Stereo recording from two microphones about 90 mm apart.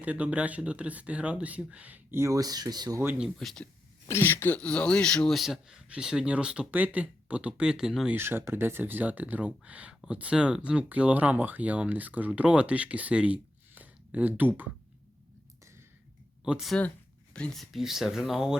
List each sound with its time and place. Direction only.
0.0 s speech: 15° right (ahead or behind); by 3.0 s 50° right (ahead or behind)
3.3 s speech: 5° left (ahead or behind)
4.1 s speech: 25° left (ahead or behind); by 8.1 s 5° right (ahead or behind)
8.1 s speech: 25° right (ahead or behind)
16.4 s speech: 5° right (ahead or behind)
17.3 s speech: 5° left (ahead or behind)